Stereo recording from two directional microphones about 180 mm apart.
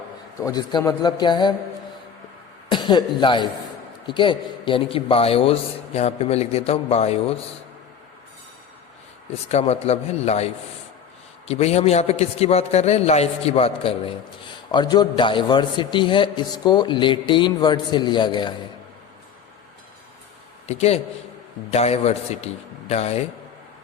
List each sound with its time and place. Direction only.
0.3 s a man's voice: 20° left (ahead or behind)
2.6 s a man's voice: 25° left (ahead or behind)
9.5 s a man's voice: 35° left (ahead or behind)
20.7 s a man's voice: 35° left (ahead or behind)